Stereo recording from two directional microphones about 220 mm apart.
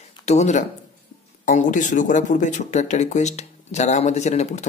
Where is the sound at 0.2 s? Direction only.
30° left (ahead or behind).